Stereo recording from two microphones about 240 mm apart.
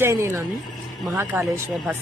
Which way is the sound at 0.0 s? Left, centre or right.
Centre.